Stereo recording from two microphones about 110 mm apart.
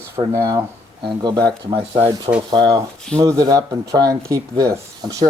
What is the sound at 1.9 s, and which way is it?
Speech, 55° right (ahead or behind).